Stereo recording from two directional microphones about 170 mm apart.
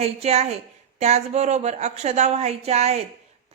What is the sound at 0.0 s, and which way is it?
Speech, 40° right (ahead or behind).